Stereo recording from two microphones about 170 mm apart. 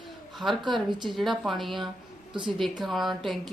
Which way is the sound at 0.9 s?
25° right (ahead or behind).